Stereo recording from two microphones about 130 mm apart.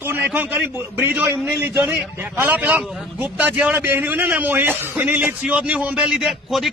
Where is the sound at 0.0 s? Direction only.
15° right (ahead or behind).